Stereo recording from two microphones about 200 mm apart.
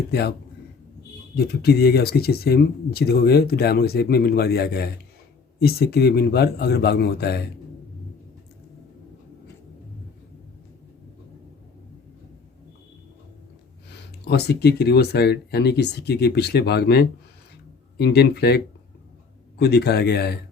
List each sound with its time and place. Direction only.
0.1 s speech: 55° left (ahead or behind)
1.6 s speech: 50° left (ahead or behind)
14.3 s speech: 55° left (ahead or behind)